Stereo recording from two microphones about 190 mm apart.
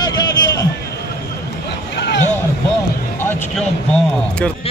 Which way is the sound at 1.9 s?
65° left (ahead or behind).